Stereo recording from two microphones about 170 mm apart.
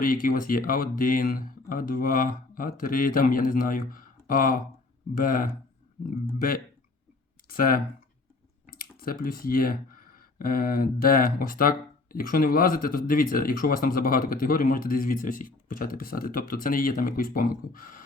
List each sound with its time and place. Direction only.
0.0 s speech: 55° left (ahead or behind)
7.5 s speech: 55° left (ahead or behind)